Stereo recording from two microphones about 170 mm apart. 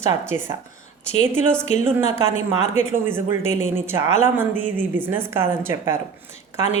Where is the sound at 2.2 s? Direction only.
40° left (ahead or behind).